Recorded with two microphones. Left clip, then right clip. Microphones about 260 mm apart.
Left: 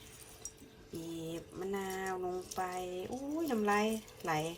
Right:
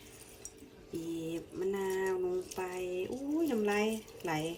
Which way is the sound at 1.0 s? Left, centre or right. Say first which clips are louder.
Right 4 dB; left.